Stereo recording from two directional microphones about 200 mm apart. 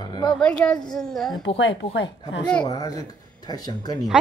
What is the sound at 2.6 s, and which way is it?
Speech, 20° left (ahead or behind).